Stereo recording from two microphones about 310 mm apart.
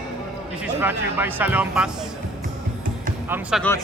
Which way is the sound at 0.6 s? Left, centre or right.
Centre.